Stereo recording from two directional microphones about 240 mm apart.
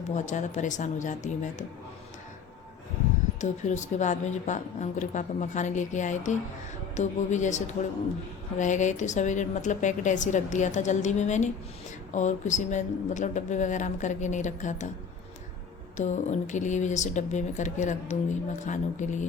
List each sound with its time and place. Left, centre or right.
0.1 s a woman's voice: left
3.4 s a woman's voice: left
16.0 s a woman's voice: left